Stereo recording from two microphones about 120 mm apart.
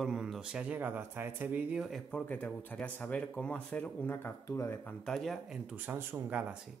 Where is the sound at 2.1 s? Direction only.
10° left (ahead or behind).